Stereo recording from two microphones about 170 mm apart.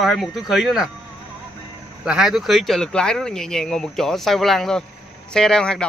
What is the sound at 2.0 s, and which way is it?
Speech, 5° right (ahead or behind).